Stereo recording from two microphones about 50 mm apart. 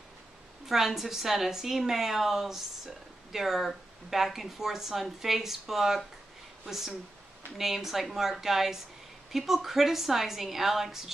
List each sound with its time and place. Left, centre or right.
0.7 s a woman's voice: centre